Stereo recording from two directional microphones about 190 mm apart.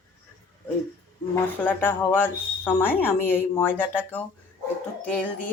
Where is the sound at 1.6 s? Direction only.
10° left (ahead or behind).